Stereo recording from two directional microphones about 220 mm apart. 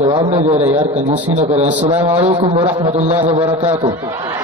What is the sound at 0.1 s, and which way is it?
Speech, 25° right (ahead or behind).